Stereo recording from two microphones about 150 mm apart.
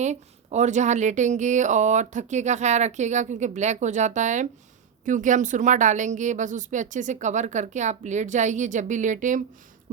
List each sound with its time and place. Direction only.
0.0 s speech: 50° right (ahead or behind)